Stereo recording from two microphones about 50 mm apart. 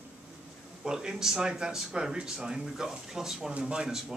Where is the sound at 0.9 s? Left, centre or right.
Centre.